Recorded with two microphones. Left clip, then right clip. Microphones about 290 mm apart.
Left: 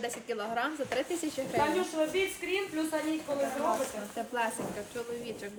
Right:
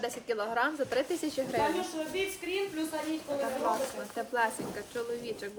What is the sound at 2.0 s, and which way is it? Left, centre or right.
Speech, left.